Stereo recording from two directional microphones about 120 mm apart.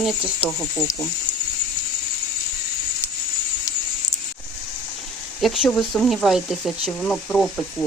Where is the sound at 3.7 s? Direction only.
30° left (ahead or behind).